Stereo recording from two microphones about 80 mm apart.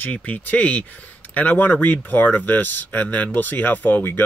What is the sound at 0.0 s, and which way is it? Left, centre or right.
Speech, centre.